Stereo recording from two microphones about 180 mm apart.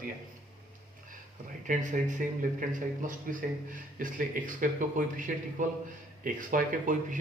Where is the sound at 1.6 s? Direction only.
45° right (ahead or behind).